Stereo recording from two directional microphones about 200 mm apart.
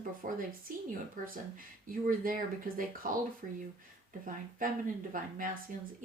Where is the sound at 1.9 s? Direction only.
45° right (ahead or behind).